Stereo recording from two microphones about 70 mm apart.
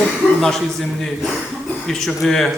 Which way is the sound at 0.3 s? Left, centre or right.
Centre.